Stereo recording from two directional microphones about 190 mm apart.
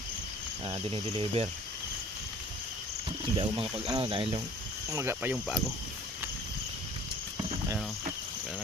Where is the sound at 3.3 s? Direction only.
30° right (ahead or behind).